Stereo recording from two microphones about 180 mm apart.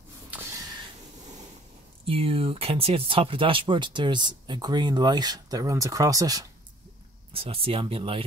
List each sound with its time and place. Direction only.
0.3 s a sound: 15° right (ahead or behind)
2.0 s speech: 30° right (ahead or behind)
7.3 s speech: 30° right (ahead or behind)